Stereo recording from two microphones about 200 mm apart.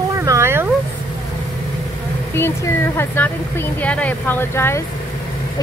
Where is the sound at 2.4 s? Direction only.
10° left (ahead or behind).